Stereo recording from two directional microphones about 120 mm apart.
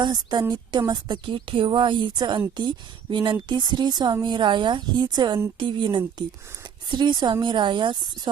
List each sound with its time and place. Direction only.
0.0 s a woman's voice: 35° right (ahead or behind)